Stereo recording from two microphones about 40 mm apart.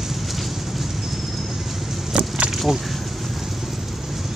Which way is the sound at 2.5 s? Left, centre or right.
Centre.